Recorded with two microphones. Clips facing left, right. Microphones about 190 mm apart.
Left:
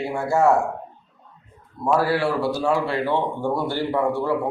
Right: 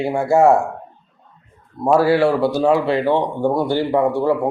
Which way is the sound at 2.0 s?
25° right (ahead or behind).